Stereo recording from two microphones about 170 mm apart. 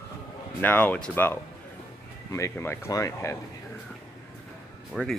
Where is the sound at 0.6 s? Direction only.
10° left (ahead or behind).